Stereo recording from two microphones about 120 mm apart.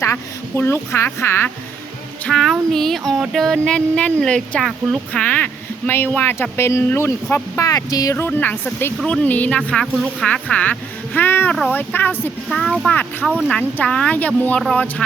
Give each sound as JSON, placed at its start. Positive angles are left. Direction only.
{"t": 0.0, "sound": "speech", "side_deg": 20}
{"t": 2.2, "sound": "speech", "side_deg": 5}
{"t": 7.7, "sound": "a sound", "side_deg": 30}
{"t": 8.1, "sound": "speech", "side_deg": 15}
{"t": 12.5, "sound": "speech", "side_deg": 5}
{"t": 12.9, "sound": "speech", "side_deg": 15}